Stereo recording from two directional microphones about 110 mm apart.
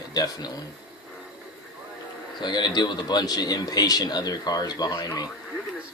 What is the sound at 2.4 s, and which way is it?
A man's voice, 40° left (ahead or behind).